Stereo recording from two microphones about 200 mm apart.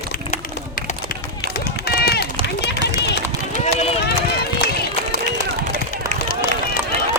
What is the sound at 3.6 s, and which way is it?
Run, 35° left (ahead or behind).